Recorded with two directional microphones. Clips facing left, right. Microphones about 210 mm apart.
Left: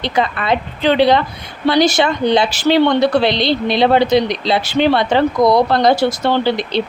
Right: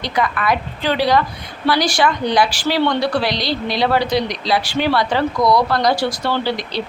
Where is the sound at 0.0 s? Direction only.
25° left (ahead or behind).